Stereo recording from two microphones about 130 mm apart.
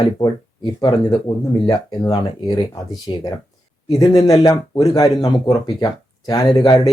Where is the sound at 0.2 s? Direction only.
35° left (ahead or behind).